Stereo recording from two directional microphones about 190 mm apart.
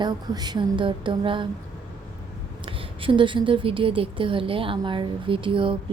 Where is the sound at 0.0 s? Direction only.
20° right (ahead or behind).